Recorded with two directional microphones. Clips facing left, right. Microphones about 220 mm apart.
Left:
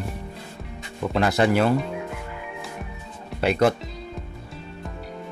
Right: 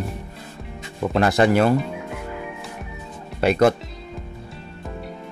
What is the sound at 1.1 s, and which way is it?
Speech, 45° right (ahead or behind).